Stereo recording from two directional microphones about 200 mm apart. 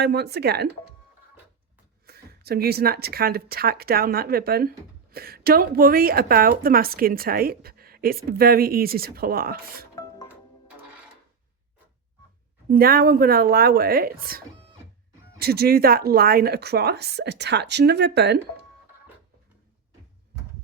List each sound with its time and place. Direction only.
0.0 s speech: 55° right (ahead or behind)
2.0 s a woman's voice: 50° right (ahead or behind)
9.9 s music: 20° left (ahead or behind)
12.7 s a woman's voice: 50° right (ahead or behind)